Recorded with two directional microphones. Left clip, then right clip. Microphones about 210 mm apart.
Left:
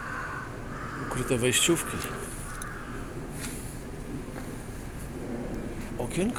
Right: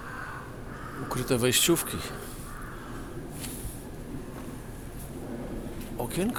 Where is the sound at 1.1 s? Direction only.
15° right (ahead or behind).